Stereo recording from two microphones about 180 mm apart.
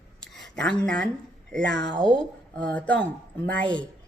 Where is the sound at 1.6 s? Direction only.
75° right (ahead or behind).